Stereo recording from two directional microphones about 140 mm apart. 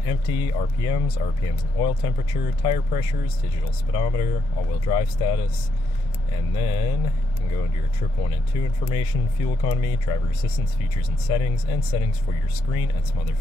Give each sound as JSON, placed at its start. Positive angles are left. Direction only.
{"t": 0.0, "sound": "speech", "side_deg": 40}
{"t": 8.2, "sound": "speech", "side_deg": 40}